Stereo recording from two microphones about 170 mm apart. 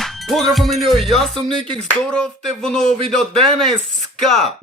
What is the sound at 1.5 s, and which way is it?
Music, 30° right (ahead or behind).